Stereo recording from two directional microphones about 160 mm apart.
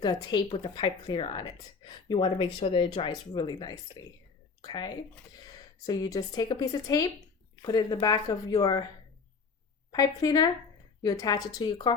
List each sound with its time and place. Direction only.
0.0 s speech: 25° left (ahead or behind)
9.9 s speech: 25° left (ahead or behind)